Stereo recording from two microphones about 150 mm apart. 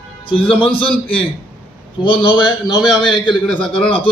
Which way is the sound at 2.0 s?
30° left (ahead or behind).